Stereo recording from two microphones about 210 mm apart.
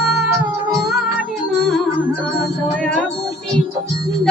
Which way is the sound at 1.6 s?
Centre (ahead or behind).